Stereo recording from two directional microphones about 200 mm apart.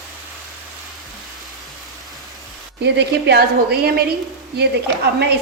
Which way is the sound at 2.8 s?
55° right (ahead or behind).